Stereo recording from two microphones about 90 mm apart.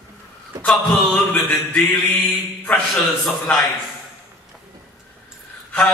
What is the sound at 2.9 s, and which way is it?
Mantra, 5° left (ahead or behind).